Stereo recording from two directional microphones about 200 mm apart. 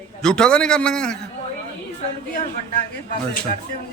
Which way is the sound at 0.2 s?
5° left (ahead or behind).